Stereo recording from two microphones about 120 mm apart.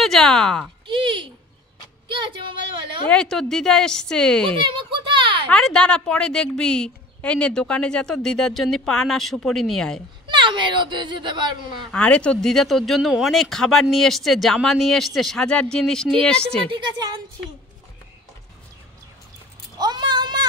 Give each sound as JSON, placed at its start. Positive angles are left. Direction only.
{"t": 0.0, "sound": "speech", "side_deg": 5}
{"t": 0.8, "sound": "a sound", "side_deg": -45}
{"t": 3.1, "sound": "a woman's voice", "side_deg": 5}
{"t": 4.6, "sound": "a sound", "side_deg": -45}
{"t": 5.5, "sound": "speech", "side_deg": 5}
{"t": 10.2, "sound": "speech", "side_deg": -40}
{"t": 11.9, "sound": "speech", "side_deg": 10}
{"t": 16.6, "sound": "speech", "side_deg": -40}
{"t": 19.8, "sound": "a sound", "side_deg": -35}